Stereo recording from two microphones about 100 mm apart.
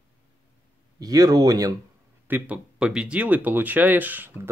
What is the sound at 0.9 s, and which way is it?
Speech, 40° right (ahead or behind).